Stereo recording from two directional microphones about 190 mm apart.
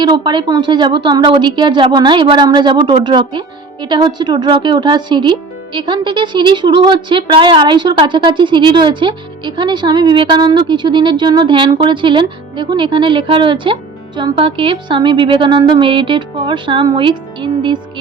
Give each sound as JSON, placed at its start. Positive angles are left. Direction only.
{"t": 0.0, "sound": "a woman's voice", "side_deg": -25}